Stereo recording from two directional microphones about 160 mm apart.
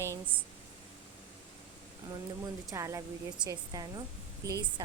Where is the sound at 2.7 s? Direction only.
20° right (ahead or behind).